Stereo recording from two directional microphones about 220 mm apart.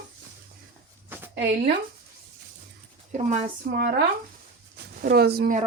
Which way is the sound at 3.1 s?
30° right (ahead or behind).